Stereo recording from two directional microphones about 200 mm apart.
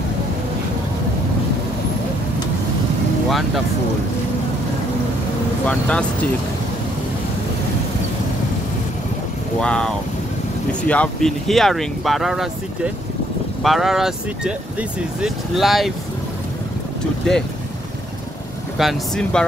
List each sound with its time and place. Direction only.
3.3 s speech: centre (ahead or behind)
5.7 s speech: 5° left (ahead or behind)
9.6 s speech: 5° left (ahead or behind)
18.8 s speech: centre (ahead or behind)